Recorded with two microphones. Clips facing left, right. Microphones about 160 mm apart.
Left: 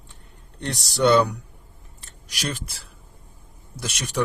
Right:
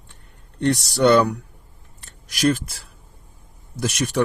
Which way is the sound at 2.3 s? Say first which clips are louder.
Right 11 dB; 50° right (ahead or behind).